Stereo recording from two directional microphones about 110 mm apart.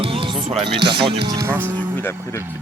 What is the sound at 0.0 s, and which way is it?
Music, 55° right (ahead or behind).